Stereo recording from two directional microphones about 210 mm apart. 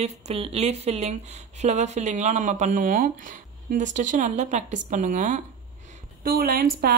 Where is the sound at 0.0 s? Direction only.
30° right (ahead or behind).